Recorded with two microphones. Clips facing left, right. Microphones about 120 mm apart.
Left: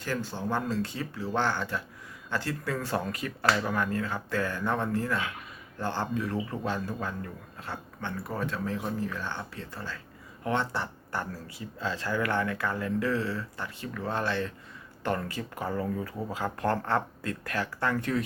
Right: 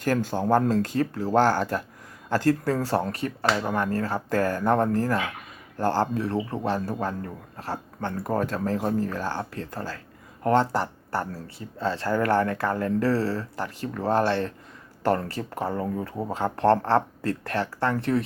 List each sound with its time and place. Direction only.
0.0 s speech: 55° right (ahead or behind); by 3.8 s 25° right (ahead or behind)
3.8 s speech: 40° right (ahead or behind)